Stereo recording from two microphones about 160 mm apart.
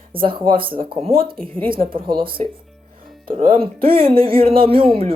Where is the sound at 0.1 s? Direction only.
35° right (ahead or behind).